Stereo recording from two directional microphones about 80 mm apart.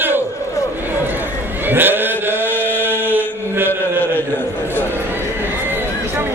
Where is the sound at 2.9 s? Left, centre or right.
Right.